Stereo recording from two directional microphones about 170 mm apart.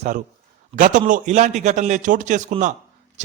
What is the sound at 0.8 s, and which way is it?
A man's voice, 50° right (ahead or behind).